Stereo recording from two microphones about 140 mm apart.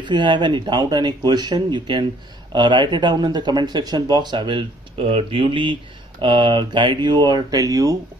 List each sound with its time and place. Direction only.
0.0 s speech: 35° right (ahead or behind)